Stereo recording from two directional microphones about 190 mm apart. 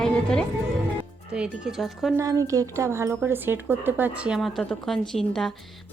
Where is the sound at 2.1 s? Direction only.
20° right (ahead or behind).